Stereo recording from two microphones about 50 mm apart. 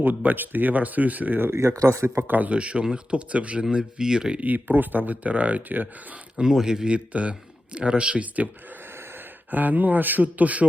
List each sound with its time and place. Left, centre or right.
0.0 s speech: right
1.5 s speech: right
2.0 s speech: right; by 4.4 s centre
4.4 s speech: right
6.3 s speech: centre
6.8 s speech: right
9.5 s speech: right